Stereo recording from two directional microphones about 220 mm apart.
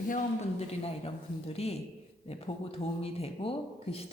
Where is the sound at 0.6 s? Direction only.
30° left (ahead or behind).